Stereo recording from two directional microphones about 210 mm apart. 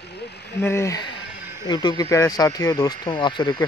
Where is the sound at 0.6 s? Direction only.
15° left (ahead or behind).